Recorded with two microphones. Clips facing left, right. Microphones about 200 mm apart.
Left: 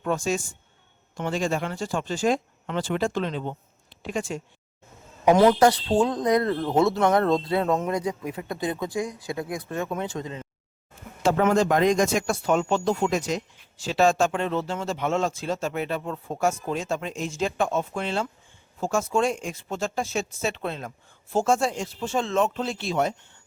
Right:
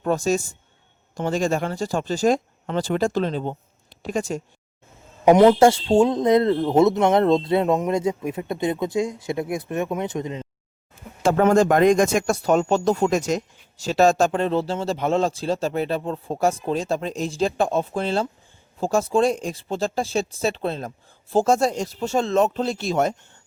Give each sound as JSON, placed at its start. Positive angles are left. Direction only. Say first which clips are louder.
{"t": 0.0, "sound": "speech", "louder": "right 4 dB", "side_deg": -40}
{"t": 5.2, "sound": "speech", "louder": "right 4 dB", "side_deg": -20}
{"t": 11.2, "sound": "speech", "louder": "right 4 dB", "side_deg": -50}